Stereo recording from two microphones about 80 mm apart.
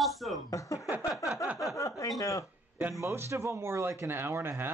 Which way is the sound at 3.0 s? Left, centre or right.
Right.